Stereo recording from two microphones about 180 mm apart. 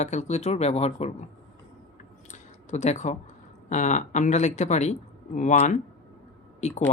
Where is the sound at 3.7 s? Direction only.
40° left (ahead or behind).